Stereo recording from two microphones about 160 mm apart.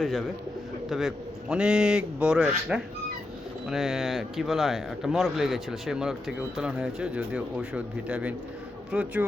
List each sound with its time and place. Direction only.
0.0 s a man's voice: 5° left (ahead or behind)